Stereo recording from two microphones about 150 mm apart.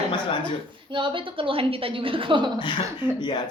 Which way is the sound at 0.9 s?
35° right (ahead or behind).